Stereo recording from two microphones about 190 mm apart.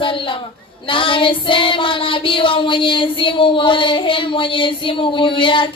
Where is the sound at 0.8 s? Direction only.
25° left (ahead or behind).